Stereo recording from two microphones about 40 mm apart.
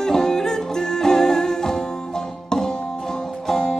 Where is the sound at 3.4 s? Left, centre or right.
Centre.